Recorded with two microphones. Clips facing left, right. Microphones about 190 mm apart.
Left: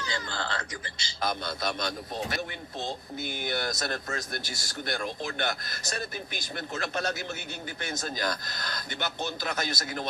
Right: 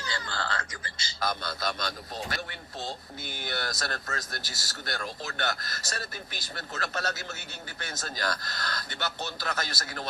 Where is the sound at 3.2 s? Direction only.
50° left (ahead or behind).